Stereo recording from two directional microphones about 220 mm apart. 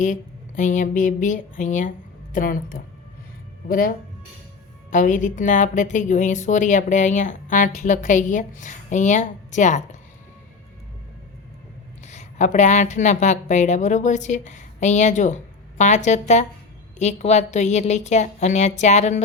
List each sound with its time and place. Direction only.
0.0 s a woman's voice: 35° left (ahead or behind)
12.0 s a woman's voice: 30° left (ahead or behind)